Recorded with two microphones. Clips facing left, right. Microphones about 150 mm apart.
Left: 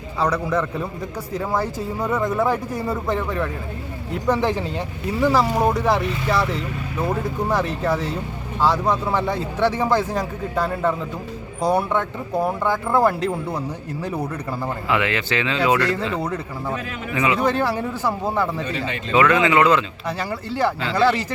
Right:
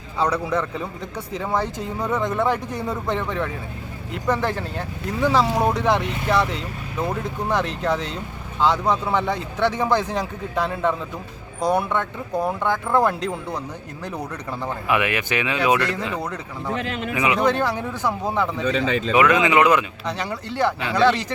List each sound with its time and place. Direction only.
0.2 s speech: centre (ahead or behind)
14.8 s speech: 15° right (ahead or behind)
16.2 s speech: 10° left (ahead or behind)
17.2 s speech: 15° right (ahead or behind)
17.4 s speech: 10° left (ahead or behind)
19.1 s speech: 15° right (ahead or behind)
20.1 s speech: 5° left (ahead or behind)